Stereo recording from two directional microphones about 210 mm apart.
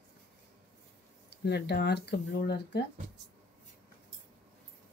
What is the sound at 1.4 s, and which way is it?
Speech, 50° left (ahead or behind).